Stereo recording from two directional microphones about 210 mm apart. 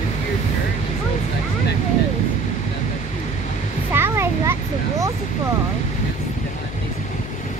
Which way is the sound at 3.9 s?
10° right (ahead or behind).